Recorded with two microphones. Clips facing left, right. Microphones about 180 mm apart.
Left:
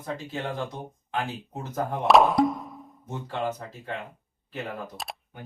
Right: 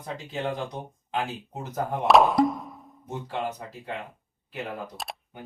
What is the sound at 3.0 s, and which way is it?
Speech, 15° right (ahead or behind).